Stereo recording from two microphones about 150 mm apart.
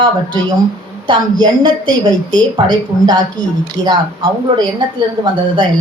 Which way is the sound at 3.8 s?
25° right (ahead or behind).